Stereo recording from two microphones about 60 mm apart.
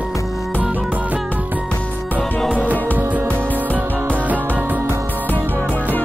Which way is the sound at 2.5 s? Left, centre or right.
Right.